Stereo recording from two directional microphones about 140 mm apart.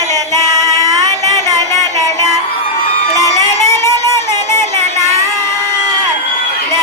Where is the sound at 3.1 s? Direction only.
20° left (ahead or behind).